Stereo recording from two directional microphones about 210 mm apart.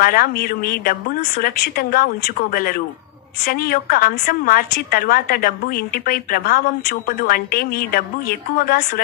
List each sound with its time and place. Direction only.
0.0 s a woman's voice: 45° left (ahead or behind)